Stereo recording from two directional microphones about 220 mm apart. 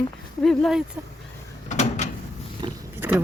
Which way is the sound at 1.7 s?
30° left (ahead or behind).